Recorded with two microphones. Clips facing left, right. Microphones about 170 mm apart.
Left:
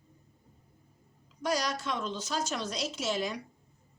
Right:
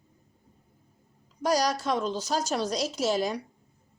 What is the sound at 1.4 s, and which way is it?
A woman's voice, 40° right (ahead or behind).